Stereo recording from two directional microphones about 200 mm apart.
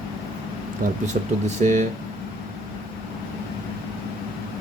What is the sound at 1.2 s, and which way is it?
Speech, 35° right (ahead or behind).